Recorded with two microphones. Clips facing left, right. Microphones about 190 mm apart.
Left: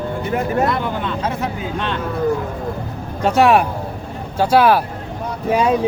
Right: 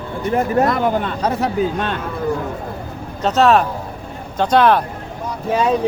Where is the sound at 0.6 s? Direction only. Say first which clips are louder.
Right 3 dB; 45° right (ahead or behind).